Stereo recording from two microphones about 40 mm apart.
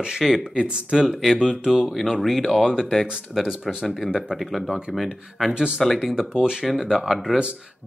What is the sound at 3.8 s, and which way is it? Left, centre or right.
Speech, centre.